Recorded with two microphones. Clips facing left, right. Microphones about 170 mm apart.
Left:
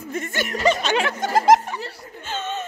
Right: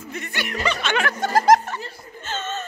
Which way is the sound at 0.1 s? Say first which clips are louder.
Left 4 dB; 45° left (ahead or behind).